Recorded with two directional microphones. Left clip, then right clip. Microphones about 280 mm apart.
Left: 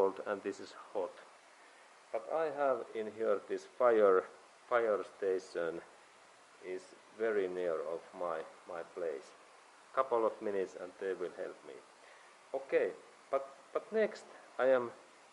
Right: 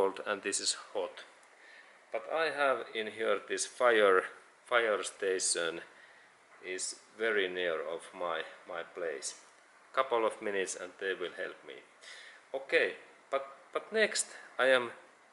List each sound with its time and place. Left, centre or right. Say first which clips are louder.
0.1 s speech: right 3 dB; centre
2.1 s speech: right 3 dB; centre
7.8 s speech: right 2 dB; left
12.6 s speech: right 4 dB; centre